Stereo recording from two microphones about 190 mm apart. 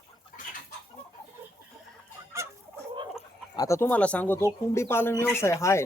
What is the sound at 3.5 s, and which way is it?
Speech, 15° left (ahead or behind).